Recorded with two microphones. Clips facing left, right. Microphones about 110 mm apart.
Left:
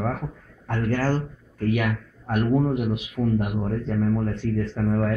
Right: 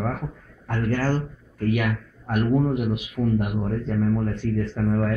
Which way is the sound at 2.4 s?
30° left (ahead or behind).